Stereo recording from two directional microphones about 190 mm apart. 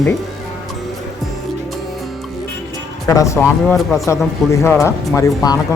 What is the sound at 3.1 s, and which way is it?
Speech, 15° left (ahead or behind).